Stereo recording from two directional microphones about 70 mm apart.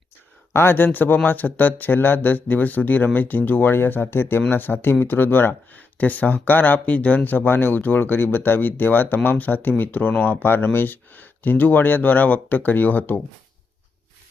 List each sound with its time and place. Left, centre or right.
0.5 s speech: left